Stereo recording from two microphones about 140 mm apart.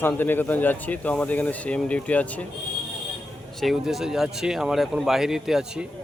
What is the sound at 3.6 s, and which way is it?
Speech, centre (ahead or behind).